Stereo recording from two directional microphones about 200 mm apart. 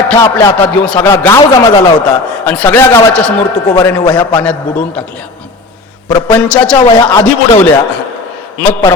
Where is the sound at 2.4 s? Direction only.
5° left (ahead or behind).